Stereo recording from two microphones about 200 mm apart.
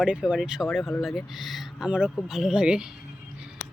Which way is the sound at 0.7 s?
10° left (ahead or behind).